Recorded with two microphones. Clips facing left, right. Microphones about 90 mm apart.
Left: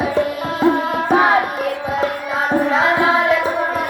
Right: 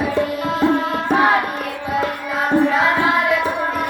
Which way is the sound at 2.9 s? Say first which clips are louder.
Left 2 dB; 10° left (ahead or behind).